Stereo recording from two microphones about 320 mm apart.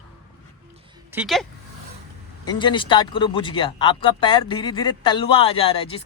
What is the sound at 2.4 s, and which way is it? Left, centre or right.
Speech, centre.